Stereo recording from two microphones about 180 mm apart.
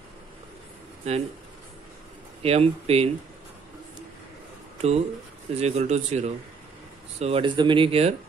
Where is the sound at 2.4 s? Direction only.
35° right (ahead or behind).